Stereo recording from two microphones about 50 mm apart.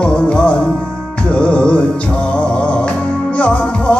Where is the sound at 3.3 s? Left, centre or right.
Left.